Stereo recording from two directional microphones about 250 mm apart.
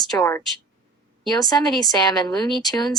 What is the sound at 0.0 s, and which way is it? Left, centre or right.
Speech, centre.